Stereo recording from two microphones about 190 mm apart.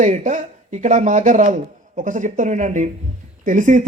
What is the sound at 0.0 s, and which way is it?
Speech, 40° right (ahead or behind).